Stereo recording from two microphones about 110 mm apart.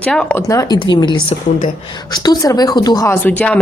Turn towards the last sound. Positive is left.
turn(degrees=15)  # may be behind; listen again after turning